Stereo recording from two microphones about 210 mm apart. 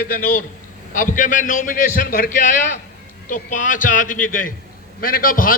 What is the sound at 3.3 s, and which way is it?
A man's voice, 40° left (ahead or behind).